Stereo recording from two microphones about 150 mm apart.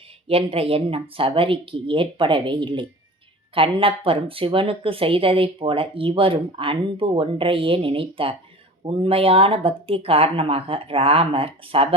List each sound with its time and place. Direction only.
0.3 s speech: 40° right (ahead or behind)